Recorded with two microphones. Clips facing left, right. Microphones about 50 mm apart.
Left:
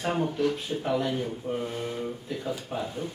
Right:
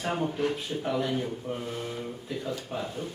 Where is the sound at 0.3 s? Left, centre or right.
Right.